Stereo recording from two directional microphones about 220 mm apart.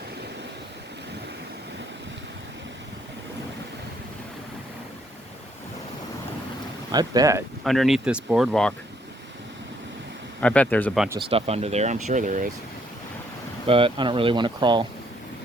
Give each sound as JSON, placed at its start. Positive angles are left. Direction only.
{"t": 6.9, "sound": "speech", "side_deg": -20}
{"t": 7.6, "sound": "speech", "side_deg": 0}
{"t": 10.4, "sound": "speech", "side_deg": 5}
{"t": 11.2, "sound": "speech", "side_deg": -25}
{"t": 13.7, "sound": "speech", "side_deg": -25}